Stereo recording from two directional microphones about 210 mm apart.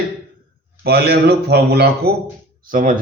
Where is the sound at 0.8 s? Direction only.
50° right (ahead or behind).